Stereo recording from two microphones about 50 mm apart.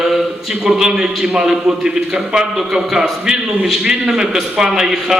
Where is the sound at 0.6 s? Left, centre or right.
Centre.